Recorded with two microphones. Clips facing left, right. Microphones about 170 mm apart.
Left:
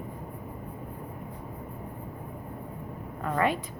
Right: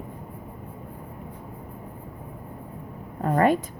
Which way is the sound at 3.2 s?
40° right (ahead or behind).